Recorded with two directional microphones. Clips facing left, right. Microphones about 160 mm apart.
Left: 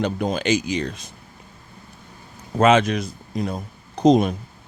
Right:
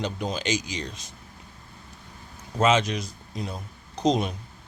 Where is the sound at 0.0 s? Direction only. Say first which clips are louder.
Left 6 dB; 55° left (ahead or behind).